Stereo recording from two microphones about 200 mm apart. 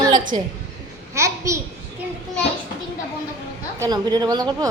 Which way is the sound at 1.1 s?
15° right (ahead or behind).